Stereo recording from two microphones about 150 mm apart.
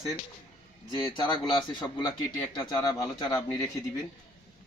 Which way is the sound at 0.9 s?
30° left (ahead or behind).